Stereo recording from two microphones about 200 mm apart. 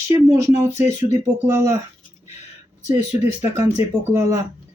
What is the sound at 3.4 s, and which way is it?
Speech, 10° right (ahead or behind).